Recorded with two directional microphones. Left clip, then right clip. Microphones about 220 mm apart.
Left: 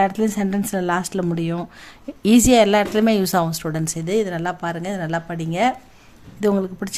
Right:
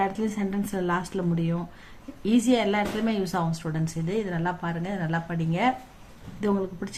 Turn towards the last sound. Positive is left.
turn(degrees=45)  # may be behind; listen again after turning